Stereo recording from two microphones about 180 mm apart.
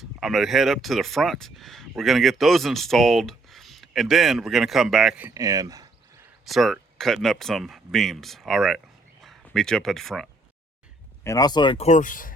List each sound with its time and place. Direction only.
0.2 s speech: centre (ahead or behind)
5.3 s speech: 20° right (ahead or behind)
6.4 s speech: centre (ahead or behind)
11.2 s speech: 20° left (ahead or behind)
11.9 s speech: 45° left (ahead or behind)